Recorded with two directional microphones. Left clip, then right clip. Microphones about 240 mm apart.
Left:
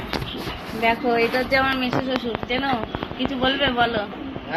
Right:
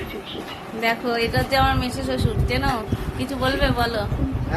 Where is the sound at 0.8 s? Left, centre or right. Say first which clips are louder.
Left 2 dB; centre.